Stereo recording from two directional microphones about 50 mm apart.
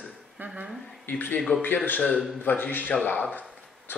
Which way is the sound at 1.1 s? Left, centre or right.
Left.